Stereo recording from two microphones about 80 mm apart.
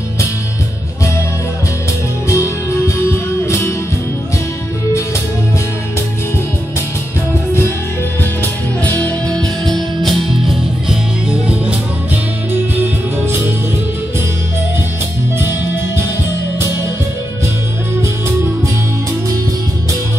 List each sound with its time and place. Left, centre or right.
2.2 s music: left
8.2 s music: left; by 10.5 s centre
10.9 s music: centre
12.7 s music: right